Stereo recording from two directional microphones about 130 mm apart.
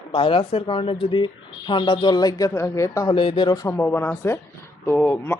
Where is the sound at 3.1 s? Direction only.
40° left (ahead or behind).